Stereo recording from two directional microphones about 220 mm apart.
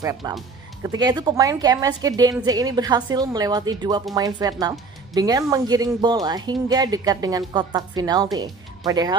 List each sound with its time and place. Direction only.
0.0 s speech: 15° right (ahead or behind)